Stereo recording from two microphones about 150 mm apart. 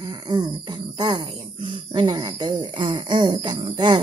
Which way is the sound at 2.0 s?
30° right (ahead or behind).